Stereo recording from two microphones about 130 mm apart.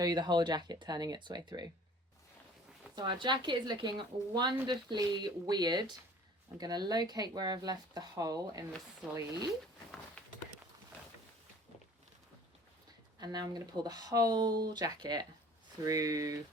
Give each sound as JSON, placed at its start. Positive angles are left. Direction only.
{"t": 0.0, "sound": "a woman's voice", "side_deg": -35}
{"t": 2.9, "sound": "a woman's voice", "side_deg": -35}
{"t": 10.2, "sound": "clip-clop", "side_deg": 10}
{"t": 13.1, "sound": "a woman's voice", "side_deg": -30}